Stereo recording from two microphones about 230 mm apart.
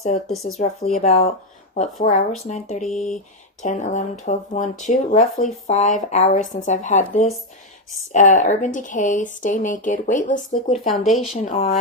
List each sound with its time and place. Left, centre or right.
0.6 s speech: left
2.8 s speech: centre
3.6 s speech: left
10.8 s speech: centre
11.4 s speech: left